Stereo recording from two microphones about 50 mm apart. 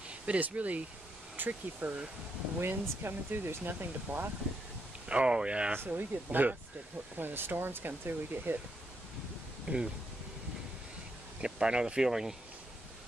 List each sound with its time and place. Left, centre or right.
0.3 s speech: right
5.0 s speech: right
5.9 s speech: right
9.7 s speech: right
11.4 s speech: centre